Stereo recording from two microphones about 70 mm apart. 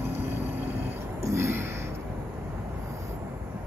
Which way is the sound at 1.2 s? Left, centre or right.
Right.